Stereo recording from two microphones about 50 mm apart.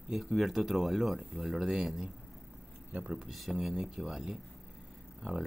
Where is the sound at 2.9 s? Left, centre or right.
Right.